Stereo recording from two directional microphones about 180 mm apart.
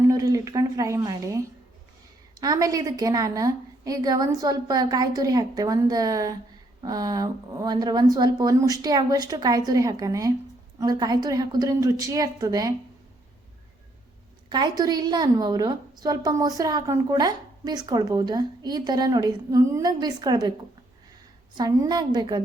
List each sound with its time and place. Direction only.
0.0 s a woman's voice: 20° right (ahead or behind)
2.4 s a woman's voice: 20° right (ahead or behind)
14.5 s a woman's voice: 20° right (ahead or behind)
21.6 s a woman's voice: 20° right (ahead or behind)